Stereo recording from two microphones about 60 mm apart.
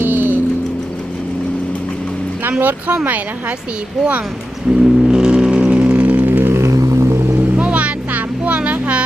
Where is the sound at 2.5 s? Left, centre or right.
Right.